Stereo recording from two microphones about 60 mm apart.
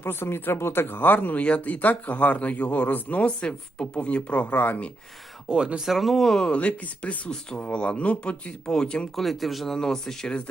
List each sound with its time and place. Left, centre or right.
0.0 s speech: left
5.5 s speech: centre
5.8 s speech: centre
6.5 s speech: left
9.1 s speech: centre